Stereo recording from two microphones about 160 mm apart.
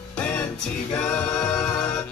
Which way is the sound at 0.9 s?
5° left (ahead or behind).